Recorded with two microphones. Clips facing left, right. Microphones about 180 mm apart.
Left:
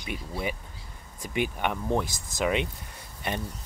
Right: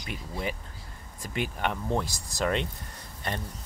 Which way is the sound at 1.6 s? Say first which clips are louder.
Right 1 dB; 10° left (ahead or behind).